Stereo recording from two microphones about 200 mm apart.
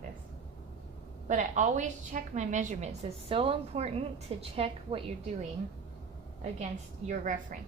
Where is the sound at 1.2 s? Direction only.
40° right (ahead or behind).